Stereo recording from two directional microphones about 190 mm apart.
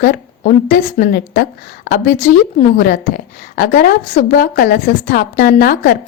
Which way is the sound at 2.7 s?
50° left (ahead or behind).